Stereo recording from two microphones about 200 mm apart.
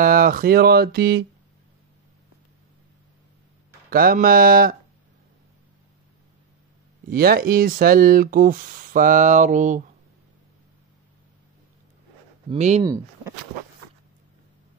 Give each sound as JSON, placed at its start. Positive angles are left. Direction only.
{"t": 0.0, "sound": "speech", "side_deg": -45}
{"t": 3.9, "sound": "speech", "side_deg": -45}
{"t": 7.1, "sound": "speech", "side_deg": -50}
{"t": 12.4, "sound": "speech", "side_deg": -35}
{"t": 12.8, "sound": "speech", "side_deg": -15}